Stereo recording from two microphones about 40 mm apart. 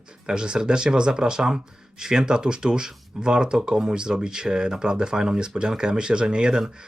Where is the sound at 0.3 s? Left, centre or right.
Centre.